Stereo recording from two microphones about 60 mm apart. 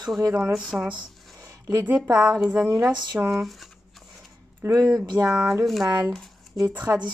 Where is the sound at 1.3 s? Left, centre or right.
Right.